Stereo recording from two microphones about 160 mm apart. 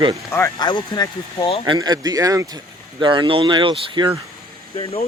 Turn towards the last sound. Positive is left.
turn(degrees=40)  # may be behind; listen again after turning